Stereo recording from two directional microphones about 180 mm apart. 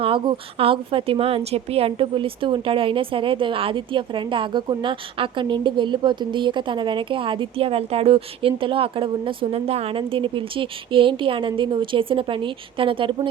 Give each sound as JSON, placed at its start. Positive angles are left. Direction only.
{"t": 0.0, "sound": "a woman's voice", "side_deg": -30}